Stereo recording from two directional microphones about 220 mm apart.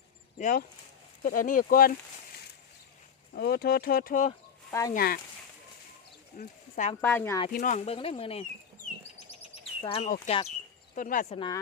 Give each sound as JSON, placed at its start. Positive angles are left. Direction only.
{"t": 0.3, "sound": "speech", "side_deg": 35}
{"t": 3.3, "sound": "speech", "side_deg": 45}
{"t": 4.7, "sound": "speech", "side_deg": 15}
{"t": 4.9, "sound": "speech", "side_deg": 40}
{"t": 6.3, "sound": "speech", "side_deg": 35}
{"t": 7.0, "sound": "speech", "side_deg": 10}
{"t": 7.5, "sound": "speech", "side_deg": 35}
{"t": 8.2, "sound": "a sound", "side_deg": 25}
{"t": 9.8, "sound": "speech", "side_deg": 25}
{"t": 11.3, "sound": "speech", "side_deg": 20}